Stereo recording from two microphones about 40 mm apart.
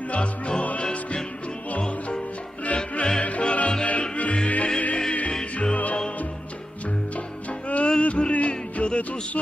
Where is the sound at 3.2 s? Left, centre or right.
Left.